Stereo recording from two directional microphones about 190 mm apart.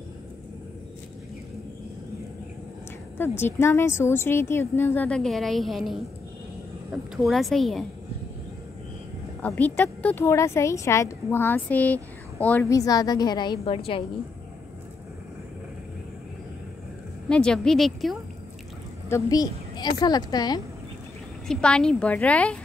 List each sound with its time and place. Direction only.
3.2 s a woman's voice: 10° left (ahead or behind)
9.4 s speech: 10° left (ahead or behind); by 14.0 s 30° left (ahead or behind)
17.3 s a woman's voice: 5° left (ahead or behind)
19.0 s a woman's voice: 15° left (ahead or behind)
21.5 s speech: 5° left (ahead or behind)